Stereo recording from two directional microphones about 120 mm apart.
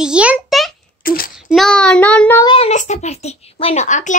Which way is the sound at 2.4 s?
55° left (ahead or behind).